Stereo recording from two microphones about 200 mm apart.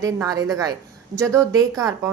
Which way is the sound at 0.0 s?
15° right (ahead or behind).